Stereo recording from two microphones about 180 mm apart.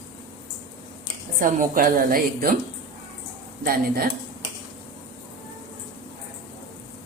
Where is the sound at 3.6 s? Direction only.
55° right (ahead or behind).